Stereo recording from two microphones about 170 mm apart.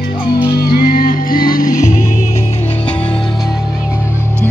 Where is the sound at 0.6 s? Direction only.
60° left (ahead or behind).